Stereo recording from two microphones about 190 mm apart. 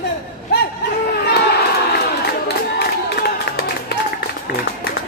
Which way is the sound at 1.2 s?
60° left (ahead or behind).